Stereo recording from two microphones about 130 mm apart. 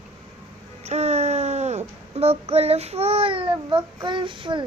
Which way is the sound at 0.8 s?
55° right (ahead or behind).